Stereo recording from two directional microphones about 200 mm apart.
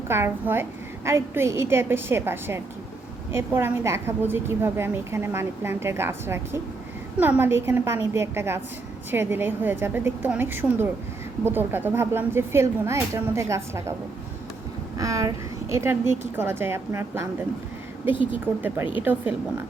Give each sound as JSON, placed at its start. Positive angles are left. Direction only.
{"t": 0.1, "sound": "a woman's voice", "side_deg": -10}
{"t": 14.9, "sound": "a woman's voice", "side_deg": -15}
{"t": 18.5, "sound": "a woman's voice", "side_deg": -10}